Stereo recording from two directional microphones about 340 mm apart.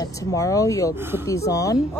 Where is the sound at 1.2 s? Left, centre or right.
Centre.